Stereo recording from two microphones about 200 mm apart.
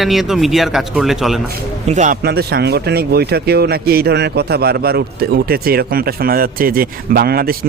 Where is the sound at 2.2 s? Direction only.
50° right (ahead or behind).